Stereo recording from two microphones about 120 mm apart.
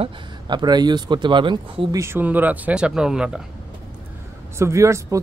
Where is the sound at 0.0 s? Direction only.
40° right (ahead or behind).